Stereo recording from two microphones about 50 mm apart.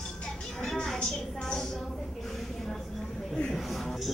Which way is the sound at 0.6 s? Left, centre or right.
Centre.